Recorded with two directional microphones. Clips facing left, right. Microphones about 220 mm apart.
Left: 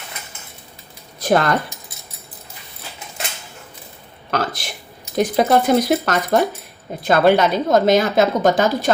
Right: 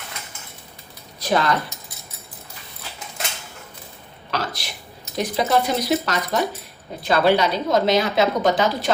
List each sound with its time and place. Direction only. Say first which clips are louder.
1.2 s speech: left 4 dB; 50° left (ahead or behind)
4.3 s a sound: left 5 dB; 50° left (ahead or behind)
5.1 s a woman's voice: left 5 dB; 50° left (ahead or behind)